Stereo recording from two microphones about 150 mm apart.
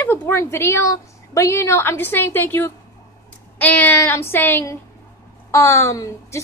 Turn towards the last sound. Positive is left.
turn(degrees=20)  # may be behind; listen again after turning